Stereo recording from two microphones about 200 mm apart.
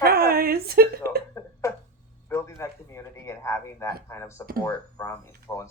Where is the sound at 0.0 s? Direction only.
50° right (ahead or behind).